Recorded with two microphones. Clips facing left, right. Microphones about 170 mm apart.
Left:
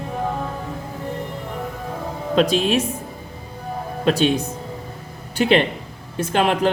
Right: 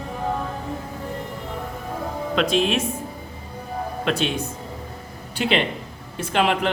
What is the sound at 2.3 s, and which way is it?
Speech, 35° left (ahead or behind).